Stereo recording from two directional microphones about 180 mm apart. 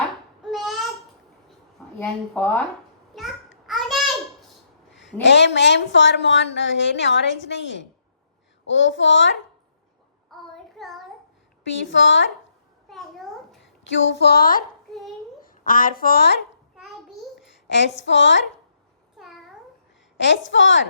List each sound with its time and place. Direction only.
0.4 s babbling: centre (ahead or behind)
2.0 s speech: 10° left (ahead or behind)
3.1 s babbling: centre (ahead or behind)
3.7 s a sound: centre (ahead or behind)
5.2 s a woman's voice: 75° left (ahead or behind)
10.3 s child singing: centre (ahead or behind)
11.9 s speech: 90° left
12.9 s a sound: centre (ahead or behind)
13.6 s a woman's voice: 90° left; by 16.3 s 55° left (ahead or behind)
17.9 s a woman's voice: 90° left
19.1 s babbling: centre (ahead or behind)
20.1 s speech: 80° left